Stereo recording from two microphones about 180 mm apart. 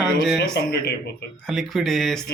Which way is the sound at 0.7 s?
65° left (ahead or behind).